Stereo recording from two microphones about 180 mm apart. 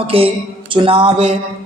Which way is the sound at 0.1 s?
30° right (ahead or behind).